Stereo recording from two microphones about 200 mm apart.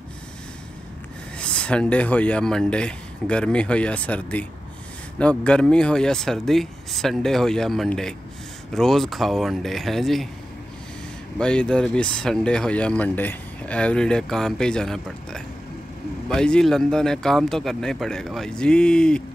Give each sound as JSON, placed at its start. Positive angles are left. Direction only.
{"t": 1.4, "sound": "speech", "side_deg": 5}
{"t": 11.3, "sound": "speech", "side_deg": 5}